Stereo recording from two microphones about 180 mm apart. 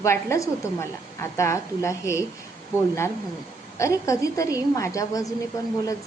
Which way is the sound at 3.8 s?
15° left (ahead or behind).